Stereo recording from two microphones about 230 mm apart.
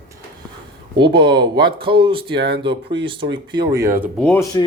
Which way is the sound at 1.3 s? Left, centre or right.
Right.